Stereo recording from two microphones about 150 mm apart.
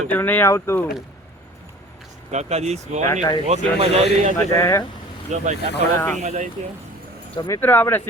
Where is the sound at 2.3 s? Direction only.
50° right (ahead or behind).